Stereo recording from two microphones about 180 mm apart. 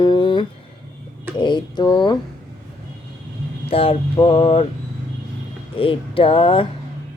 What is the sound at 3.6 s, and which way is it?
Mantra, 30° left (ahead or behind).